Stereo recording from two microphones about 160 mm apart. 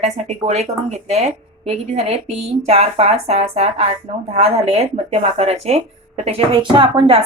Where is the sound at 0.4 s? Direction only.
45° right (ahead or behind).